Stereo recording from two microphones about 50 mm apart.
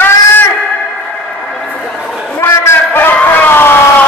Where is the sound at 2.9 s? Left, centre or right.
Left.